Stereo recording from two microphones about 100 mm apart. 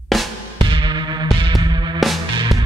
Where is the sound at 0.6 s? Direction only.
55° right (ahead or behind).